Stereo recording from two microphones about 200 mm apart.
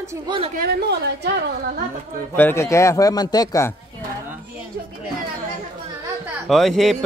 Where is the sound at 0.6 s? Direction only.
55° right (ahead or behind).